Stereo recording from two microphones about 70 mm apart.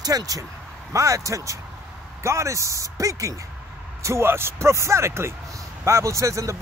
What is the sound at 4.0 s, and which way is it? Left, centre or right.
A man's voice, right.